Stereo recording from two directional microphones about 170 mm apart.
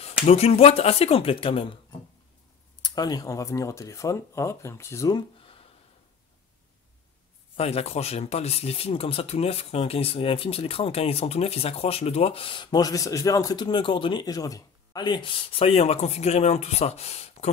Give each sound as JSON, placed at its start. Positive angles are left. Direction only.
{"t": 0.0, "sound": "speech", "side_deg": 35}
{"t": 5.4, "sound": "a sound", "side_deg": 35}
{"t": 7.5, "sound": "speech", "side_deg": 35}